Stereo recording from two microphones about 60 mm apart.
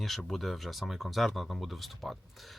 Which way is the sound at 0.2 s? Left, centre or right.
Centre.